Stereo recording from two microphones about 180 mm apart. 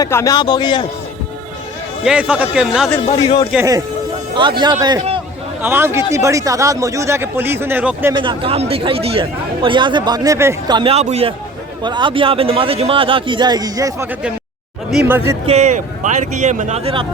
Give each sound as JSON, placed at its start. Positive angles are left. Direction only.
{"t": 0.0, "sound": "a man's voice", "side_deg": 20}
{"t": 2.0, "sound": "speech", "side_deg": -5}
{"t": 3.1, "sound": "a man's voice", "side_deg": 25}
{"t": 4.4, "sound": "a man's voice", "side_deg": -25}
{"t": 5.6, "sound": "a man's voice", "side_deg": -15}
{"t": 8.1, "sound": "a man's voice", "side_deg": -25}
{"t": 10.8, "sound": "a man's voice", "side_deg": -30}
{"t": 14.8, "sound": "a man's voice", "side_deg": -5}
{"t": 15.4, "sound": "speech", "side_deg": -40}